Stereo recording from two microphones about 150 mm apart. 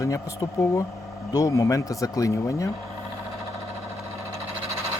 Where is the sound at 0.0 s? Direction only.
20° left (ahead or behind).